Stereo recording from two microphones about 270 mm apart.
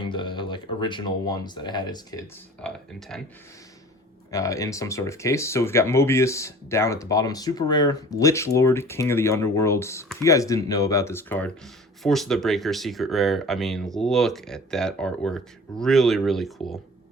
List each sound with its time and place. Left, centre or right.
0.0 s speech: centre
4.3 s speech: centre